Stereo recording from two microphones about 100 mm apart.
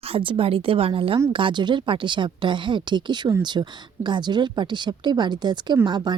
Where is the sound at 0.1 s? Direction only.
65° right (ahead or behind).